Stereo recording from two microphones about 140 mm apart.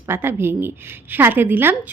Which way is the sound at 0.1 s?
15° right (ahead or behind).